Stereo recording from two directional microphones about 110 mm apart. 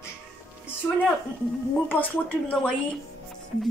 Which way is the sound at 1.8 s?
15° left (ahead or behind).